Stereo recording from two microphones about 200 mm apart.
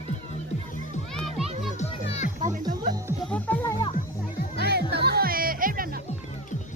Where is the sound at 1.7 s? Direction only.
35° left (ahead or behind).